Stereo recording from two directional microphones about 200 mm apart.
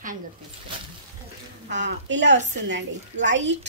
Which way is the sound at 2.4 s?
35° right (ahead or behind).